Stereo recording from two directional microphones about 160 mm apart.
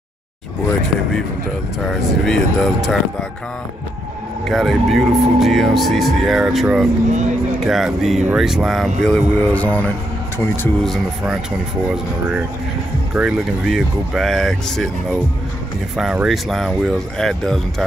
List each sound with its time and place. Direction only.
1.9 s speech: centre (ahead or behind)
4.5 s speech: centre (ahead or behind)
7.1 s speech: 50° right (ahead or behind)
7.6 s speech: centre (ahead or behind); by 10.7 s 15° left (ahead or behind)
10.8 s speech: centre (ahead or behind)
11.9 s speech: 10° right (ahead or behind)